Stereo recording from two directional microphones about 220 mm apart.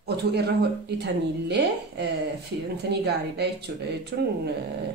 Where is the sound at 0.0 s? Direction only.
50° right (ahead or behind).